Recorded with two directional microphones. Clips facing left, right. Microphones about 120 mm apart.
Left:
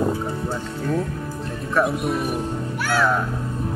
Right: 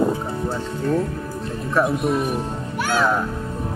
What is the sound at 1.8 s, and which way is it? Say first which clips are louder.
Speech: right 1 dB; centre (ahead or behind).